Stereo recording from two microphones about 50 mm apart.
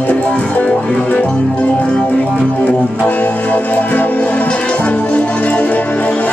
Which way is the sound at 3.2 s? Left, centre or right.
Left.